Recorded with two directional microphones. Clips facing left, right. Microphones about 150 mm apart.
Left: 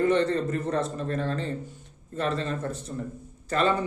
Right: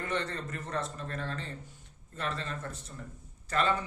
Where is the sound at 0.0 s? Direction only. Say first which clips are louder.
Left 12 dB; 25° left (ahead or behind).